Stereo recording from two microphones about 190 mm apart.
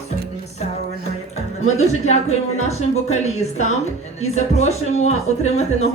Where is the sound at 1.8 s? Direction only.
35° left (ahead or behind).